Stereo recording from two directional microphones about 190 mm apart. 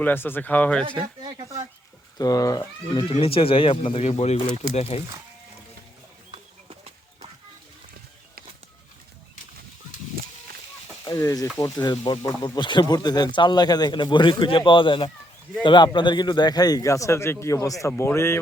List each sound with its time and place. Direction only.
0.0 s a man's voice: 10° left (ahead or behind)
0.9 s speech: 25° right (ahead or behind)
2.1 s speech: 20° left (ahead or behind)
6.3 s clip-clop: 30° right (ahead or behind)
11.0 s a man's voice: 15° left (ahead or behind)